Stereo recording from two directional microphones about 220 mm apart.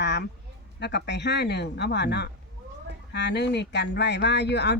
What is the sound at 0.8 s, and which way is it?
Speech, 50° left (ahead or behind).